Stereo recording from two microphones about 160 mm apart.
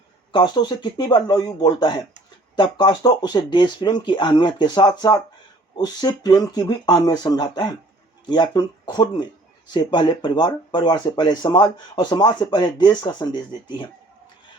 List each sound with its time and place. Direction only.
0.3 s speech: 30° left (ahead or behind)